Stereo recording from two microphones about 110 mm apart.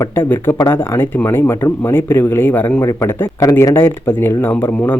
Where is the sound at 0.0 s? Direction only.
20° left (ahead or behind).